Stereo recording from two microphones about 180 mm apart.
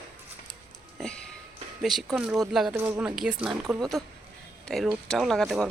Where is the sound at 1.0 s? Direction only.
5° left (ahead or behind).